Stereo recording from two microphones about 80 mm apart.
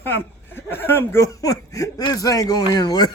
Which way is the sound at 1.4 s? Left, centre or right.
Left.